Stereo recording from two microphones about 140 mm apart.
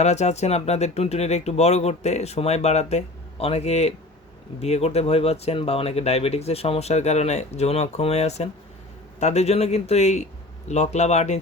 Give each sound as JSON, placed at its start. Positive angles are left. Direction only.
{"t": 0.0, "sound": "speech", "side_deg": 55}